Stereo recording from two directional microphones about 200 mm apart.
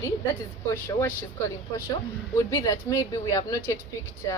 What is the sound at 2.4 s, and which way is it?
Speech, 15° left (ahead or behind).